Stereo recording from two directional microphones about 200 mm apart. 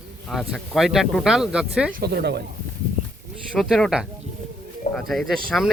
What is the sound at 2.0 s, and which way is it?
Speech, 55° right (ahead or behind).